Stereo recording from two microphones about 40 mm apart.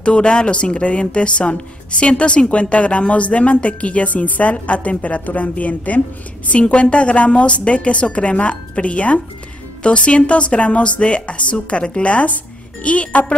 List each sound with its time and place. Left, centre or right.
0.0 s speech: left